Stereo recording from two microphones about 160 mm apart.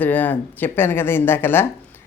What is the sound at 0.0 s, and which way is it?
A man's voice, 10° left (ahead or behind).